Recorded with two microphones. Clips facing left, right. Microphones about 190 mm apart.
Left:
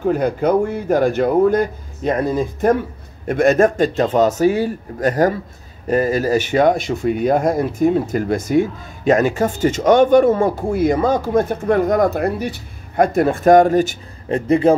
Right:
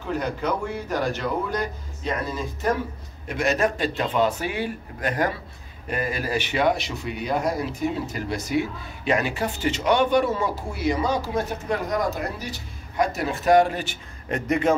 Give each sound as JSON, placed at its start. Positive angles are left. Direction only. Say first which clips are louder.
{"t": 0.0, "sound": "speech", "louder": "left 10 dB", "side_deg": 50}
{"t": 14.3, "sound": "a man's voice", "louder": "left 8 dB", "side_deg": 30}